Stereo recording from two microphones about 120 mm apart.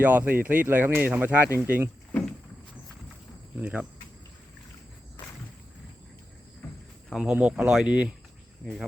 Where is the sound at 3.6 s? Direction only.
10° right (ahead or behind).